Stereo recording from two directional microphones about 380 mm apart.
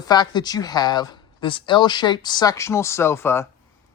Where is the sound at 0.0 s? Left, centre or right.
Centre.